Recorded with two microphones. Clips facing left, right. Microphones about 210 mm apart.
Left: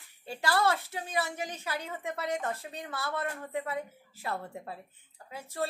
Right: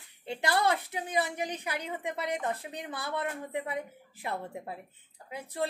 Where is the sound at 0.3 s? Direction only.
20° right (ahead or behind).